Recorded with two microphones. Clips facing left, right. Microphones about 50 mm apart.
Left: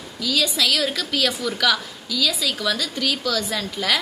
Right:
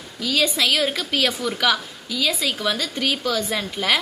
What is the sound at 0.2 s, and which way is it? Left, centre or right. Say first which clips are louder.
A woman's voice: right 1 dB; right.